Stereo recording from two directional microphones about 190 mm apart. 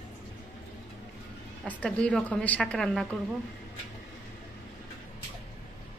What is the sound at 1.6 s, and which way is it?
A woman's voice, 5° left (ahead or behind).